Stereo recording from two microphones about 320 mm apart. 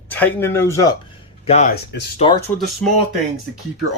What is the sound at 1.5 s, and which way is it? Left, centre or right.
Speech, left.